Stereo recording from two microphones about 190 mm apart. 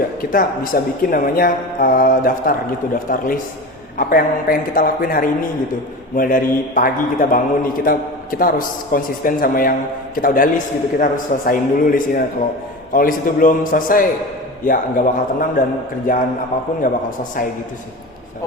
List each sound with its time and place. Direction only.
0.2 s a man's voice: 45° left (ahead or behind)